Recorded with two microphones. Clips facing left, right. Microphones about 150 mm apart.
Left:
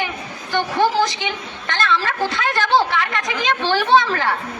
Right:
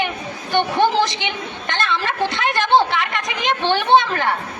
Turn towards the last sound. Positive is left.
turn(degrees=-20)  # may be behind; listen again after turning